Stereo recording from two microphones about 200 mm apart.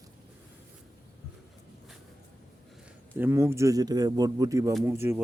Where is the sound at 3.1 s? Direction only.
10° right (ahead or behind).